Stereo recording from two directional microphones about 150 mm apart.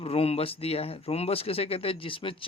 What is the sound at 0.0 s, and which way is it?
Speech, 40° left (ahead or behind).